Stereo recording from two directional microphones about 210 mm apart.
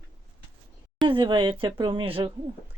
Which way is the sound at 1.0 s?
20° right (ahead or behind).